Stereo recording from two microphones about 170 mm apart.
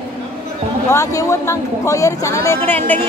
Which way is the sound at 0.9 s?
20° left (ahead or behind).